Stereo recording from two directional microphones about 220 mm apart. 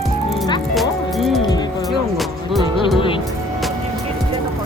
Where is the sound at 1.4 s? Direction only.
20° left (ahead or behind).